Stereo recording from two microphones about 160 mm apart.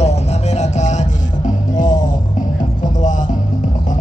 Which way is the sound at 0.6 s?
45° left (ahead or behind).